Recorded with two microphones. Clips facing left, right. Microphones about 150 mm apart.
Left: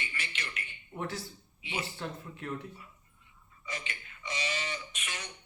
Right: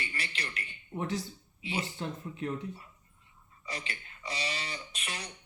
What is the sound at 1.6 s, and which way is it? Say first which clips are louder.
Speech: right 3 dB; 35° right (ahead or behind).